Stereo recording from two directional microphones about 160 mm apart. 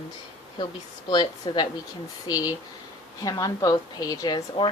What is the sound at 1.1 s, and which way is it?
A woman's voice, 30° left (ahead or behind).